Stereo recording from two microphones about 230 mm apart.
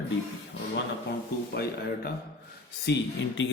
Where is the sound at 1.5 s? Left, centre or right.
Left.